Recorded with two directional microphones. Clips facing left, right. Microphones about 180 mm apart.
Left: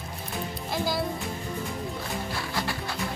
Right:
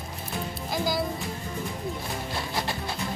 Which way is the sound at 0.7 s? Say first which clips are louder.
Right 1 dB; centre (ahead or behind).